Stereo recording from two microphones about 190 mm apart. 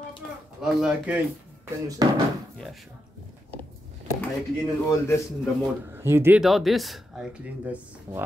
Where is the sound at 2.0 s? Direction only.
20° right (ahead or behind).